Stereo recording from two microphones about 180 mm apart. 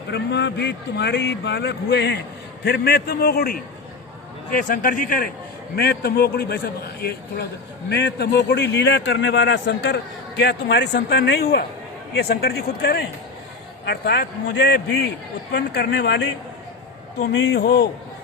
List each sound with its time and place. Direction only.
0.1 s a man's voice: 70° left (ahead or behind); by 5.3 s 50° left (ahead or behind)
5.7 s a man's voice: 60° left (ahead or behind)
7.9 s a man's voice: 70° left (ahead or behind)